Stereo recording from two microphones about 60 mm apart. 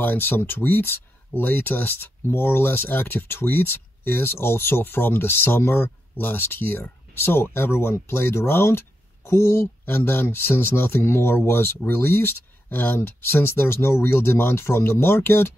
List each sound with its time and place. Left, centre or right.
0.0 s speech: left